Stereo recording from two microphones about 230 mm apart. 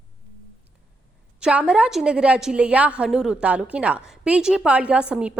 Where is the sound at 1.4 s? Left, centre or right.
Centre.